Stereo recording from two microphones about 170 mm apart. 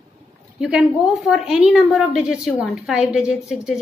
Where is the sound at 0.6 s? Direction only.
5° right (ahead or behind).